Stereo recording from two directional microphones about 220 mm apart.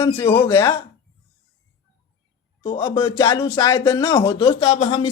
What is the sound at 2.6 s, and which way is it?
Speech, 20° left (ahead or behind).